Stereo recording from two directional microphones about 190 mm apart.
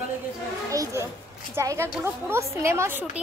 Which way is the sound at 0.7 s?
15° right (ahead or behind).